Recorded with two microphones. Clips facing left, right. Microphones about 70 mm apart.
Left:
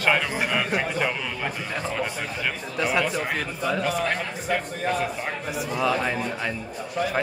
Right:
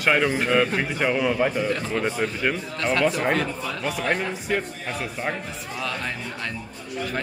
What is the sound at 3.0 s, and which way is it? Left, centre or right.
Speech, centre.